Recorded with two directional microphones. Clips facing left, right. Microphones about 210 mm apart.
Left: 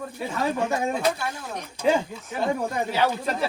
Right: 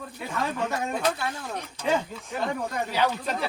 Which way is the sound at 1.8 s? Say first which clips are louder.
Left 4 dB; 10° left (ahead or behind).